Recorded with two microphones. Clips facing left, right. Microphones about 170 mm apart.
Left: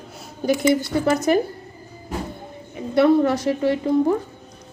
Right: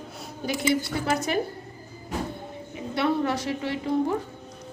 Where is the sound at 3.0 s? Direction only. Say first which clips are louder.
Left 9 dB; 45° left (ahead or behind).